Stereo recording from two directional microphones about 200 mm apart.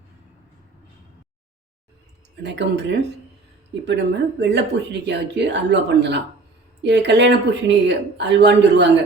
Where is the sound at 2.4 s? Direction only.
60° right (ahead or behind).